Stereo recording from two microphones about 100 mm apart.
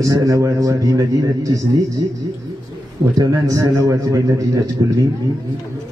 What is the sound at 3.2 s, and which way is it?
A man's voice, 35° right (ahead or behind).